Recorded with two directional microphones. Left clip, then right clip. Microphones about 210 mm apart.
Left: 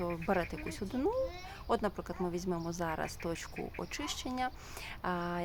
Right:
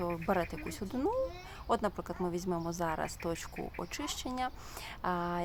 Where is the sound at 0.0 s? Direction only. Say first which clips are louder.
Right 1 dB; 5° right (ahead or behind).